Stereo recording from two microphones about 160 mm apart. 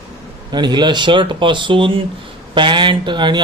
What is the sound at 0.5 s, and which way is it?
A man's voice, 25° right (ahead or behind).